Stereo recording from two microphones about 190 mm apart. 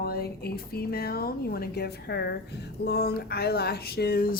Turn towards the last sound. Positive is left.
turn(degrees=50)  # may be behind; listen again after turning